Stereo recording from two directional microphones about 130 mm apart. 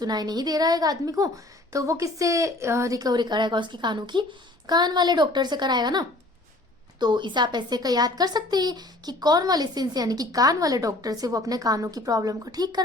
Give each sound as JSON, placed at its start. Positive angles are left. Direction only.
{"t": 0.0, "sound": "speech", "side_deg": -30}